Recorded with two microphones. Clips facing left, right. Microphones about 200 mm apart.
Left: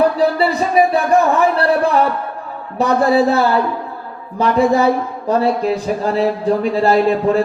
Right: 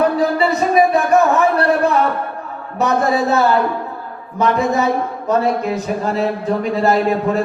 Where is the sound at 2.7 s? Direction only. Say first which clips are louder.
Left 3 dB; 30° left (ahead or behind).